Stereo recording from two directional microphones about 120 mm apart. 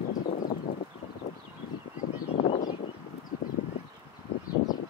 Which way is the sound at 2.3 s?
60° left (ahead or behind).